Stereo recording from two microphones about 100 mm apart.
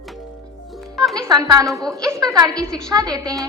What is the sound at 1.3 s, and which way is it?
A woman's voice, 40° right (ahead or behind).